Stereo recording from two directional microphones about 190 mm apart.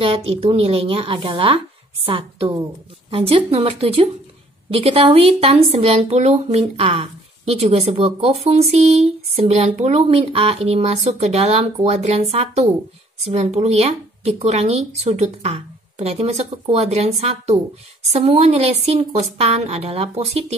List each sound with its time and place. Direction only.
0.0 s a woman's voice: 30° right (ahead or behind)